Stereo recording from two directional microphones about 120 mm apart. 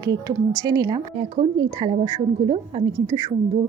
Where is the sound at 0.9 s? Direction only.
45° right (ahead or behind).